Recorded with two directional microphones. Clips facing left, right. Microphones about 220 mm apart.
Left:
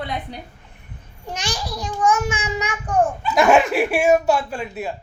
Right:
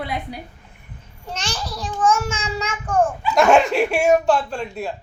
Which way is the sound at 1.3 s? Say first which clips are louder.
Left 1 dB; 15° left (ahead or behind).